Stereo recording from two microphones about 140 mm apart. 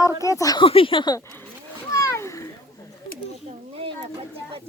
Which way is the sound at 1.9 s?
20° left (ahead or behind).